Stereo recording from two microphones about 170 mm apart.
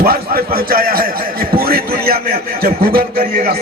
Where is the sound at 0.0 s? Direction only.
60° right (ahead or behind).